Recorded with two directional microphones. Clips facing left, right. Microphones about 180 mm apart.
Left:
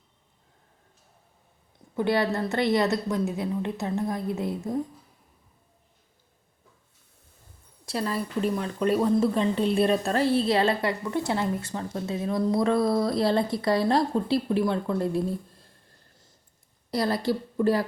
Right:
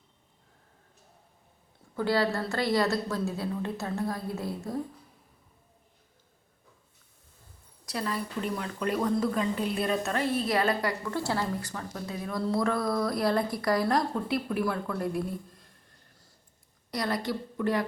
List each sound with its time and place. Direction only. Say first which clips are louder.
2.0 s speech: left 2 dB; 20° left (ahead or behind)
7.9 s speech: left 4 dB; 25° left (ahead or behind)
16.9 s speech: left 5 dB; 30° left (ahead or behind)